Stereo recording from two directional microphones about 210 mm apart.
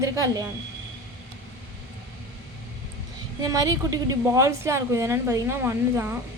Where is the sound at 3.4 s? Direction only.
15° right (ahead or behind).